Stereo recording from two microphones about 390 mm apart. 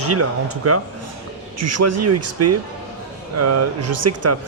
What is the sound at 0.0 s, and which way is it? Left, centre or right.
Speech, right.